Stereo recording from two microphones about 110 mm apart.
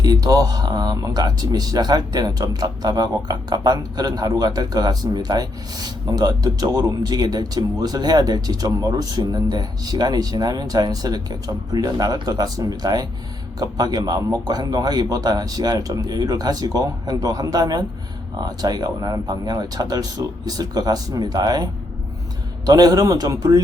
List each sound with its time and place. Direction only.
0.0 s speech: 35° right (ahead or behind)